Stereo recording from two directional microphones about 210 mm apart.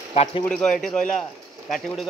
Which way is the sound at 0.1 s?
25° left (ahead or behind).